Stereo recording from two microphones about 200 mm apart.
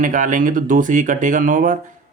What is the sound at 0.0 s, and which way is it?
Speech, 40° right (ahead or behind).